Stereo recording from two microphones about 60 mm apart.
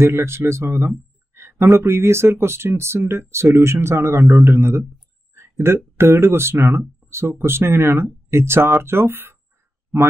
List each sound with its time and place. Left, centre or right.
0.0 s speech: right
5.3 s a sound: right
5.9 s speech: right